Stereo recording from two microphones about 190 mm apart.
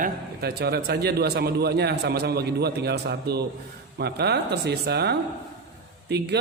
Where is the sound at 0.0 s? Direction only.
55° right (ahead or behind).